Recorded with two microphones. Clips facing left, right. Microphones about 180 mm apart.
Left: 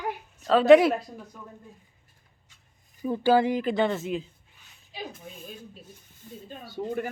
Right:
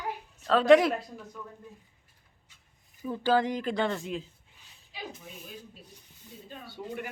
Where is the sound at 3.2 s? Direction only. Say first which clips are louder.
Left 4 dB; 10° left (ahead or behind).